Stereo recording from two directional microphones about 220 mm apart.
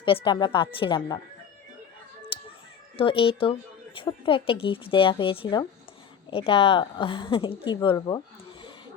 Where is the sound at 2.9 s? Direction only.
25° left (ahead or behind).